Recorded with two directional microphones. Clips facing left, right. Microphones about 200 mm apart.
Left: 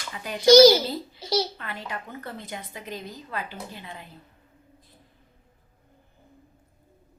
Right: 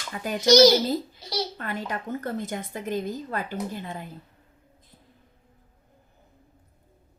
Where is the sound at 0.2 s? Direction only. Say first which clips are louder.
Right 5 dB; 45° right (ahead or behind).